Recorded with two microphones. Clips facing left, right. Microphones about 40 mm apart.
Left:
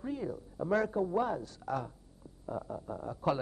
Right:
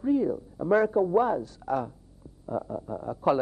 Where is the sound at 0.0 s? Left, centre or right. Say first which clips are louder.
Right 12 dB; centre.